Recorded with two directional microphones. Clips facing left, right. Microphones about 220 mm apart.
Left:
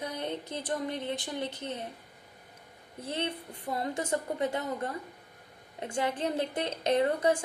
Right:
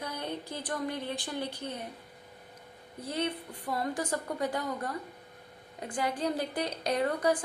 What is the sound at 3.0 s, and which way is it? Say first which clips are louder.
A woman's voice: right 1 dB; 25° left (ahead or behind).